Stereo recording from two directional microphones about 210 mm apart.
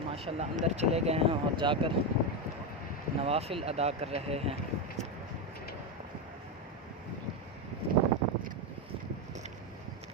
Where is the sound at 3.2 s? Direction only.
30° right (ahead or behind).